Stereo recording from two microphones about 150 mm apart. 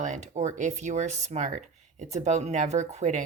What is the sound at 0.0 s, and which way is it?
Speech, 55° right (ahead or behind).